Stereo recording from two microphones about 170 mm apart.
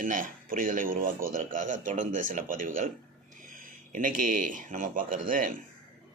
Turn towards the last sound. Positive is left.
turn(degrees=-50)  # may be behind; listen again after turning